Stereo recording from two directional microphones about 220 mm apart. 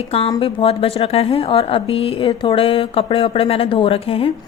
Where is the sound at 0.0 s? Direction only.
25° left (ahead or behind).